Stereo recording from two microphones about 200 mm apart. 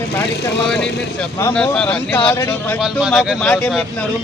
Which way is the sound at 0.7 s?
5° left (ahead or behind).